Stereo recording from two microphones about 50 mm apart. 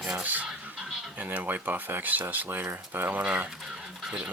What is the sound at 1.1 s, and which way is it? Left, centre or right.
Speech, right.